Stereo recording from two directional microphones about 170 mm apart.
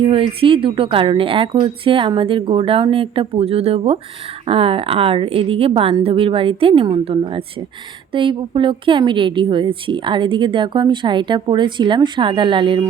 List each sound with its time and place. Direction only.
0.0 s a woman's voice: 30° right (ahead or behind)